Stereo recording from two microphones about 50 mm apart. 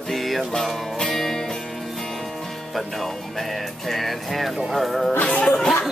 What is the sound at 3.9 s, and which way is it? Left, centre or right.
Speech, centre.